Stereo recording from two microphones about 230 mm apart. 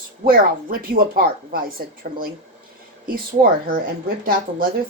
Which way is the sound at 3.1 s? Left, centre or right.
Right.